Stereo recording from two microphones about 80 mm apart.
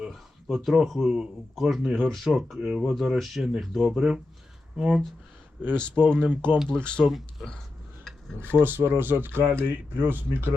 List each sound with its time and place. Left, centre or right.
0.0 s speech: centre
5.6 s speech: centre
7.0 s speech: centre
8.4 s speech: right